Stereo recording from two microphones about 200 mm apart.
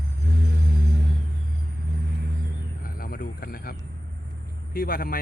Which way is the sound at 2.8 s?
45° left (ahead or behind).